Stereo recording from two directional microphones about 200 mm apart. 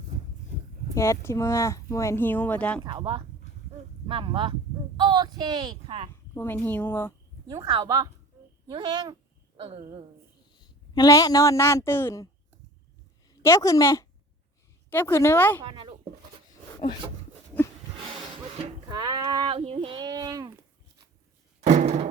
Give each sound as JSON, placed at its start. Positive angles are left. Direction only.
{"t": 0.9, "sound": "speech", "side_deg": 15}
{"t": 2.8, "sound": "speech", "side_deg": -25}
{"t": 6.3, "sound": "speech", "side_deg": 10}
{"t": 7.4, "sound": "speech", "side_deg": -20}
{"t": 10.9, "sound": "speech", "side_deg": 20}
{"t": 13.4, "sound": "speech", "side_deg": 15}
{"t": 15.6, "sound": "speech", "side_deg": -25}
{"t": 18.5, "sound": "speech", "side_deg": -25}
{"t": 21.7, "sound": "a sound", "side_deg": -35}